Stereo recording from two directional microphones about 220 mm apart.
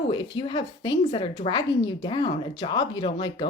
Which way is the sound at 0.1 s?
20° left (ahead or behind).